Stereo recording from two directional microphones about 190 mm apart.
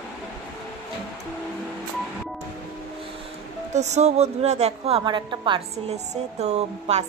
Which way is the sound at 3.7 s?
35° right (ahead or behind).